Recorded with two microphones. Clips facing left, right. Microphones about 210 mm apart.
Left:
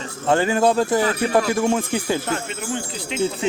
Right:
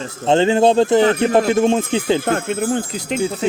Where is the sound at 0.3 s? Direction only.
25° right (ahead or behind).